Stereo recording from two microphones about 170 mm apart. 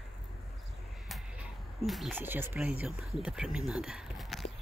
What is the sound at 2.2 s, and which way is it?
Speech, 15° right (ahead or behind).